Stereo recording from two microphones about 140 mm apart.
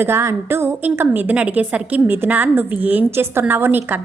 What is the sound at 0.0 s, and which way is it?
A woman's voice, 15° right (ahead or behind).